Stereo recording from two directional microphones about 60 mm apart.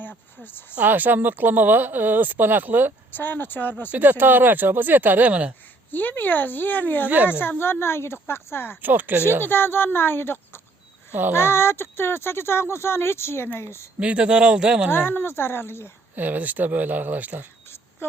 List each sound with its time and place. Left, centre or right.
0.4 s speech: left
0.8 s speech: right
3.1 s speech: left
3.9 s speech: right
5.9 s speech: left
8.8 s speech: right
9.4 s speech: left
11.1 s a child's voice: right
11.3 s speech: left
14.0 s speech: centre
14.8 s speech: left
16.1 s speech: right